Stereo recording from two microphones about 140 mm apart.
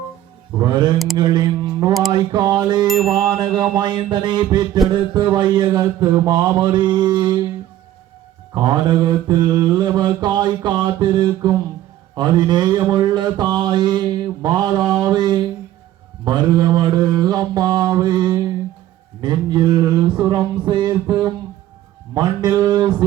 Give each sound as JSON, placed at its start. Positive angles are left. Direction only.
{"t": 0.5, "sound": "mantra", "side_deg": -30}
{"t": 1.1, "sound": "speech", "side_deg": -30}
{"t": 1.9, "sound": "a sound", "side_deg": 0}
{"t": 2.1, "sound": "mantra", "side_deg": -30}
{"t": 8.5, "sound": "mantra", "side_deg": -30}